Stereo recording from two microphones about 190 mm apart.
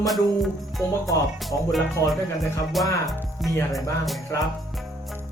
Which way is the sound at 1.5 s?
15° left (ahead or behind).